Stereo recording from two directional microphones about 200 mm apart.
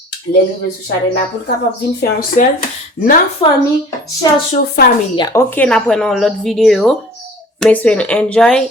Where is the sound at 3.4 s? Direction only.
25° left (ahead or behind).